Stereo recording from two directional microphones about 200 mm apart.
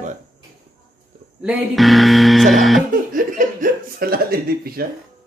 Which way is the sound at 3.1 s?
45° right (ahead or behind).